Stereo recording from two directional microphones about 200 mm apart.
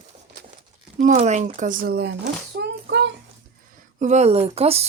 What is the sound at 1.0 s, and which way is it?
Speech, 35° right (ahead or behind).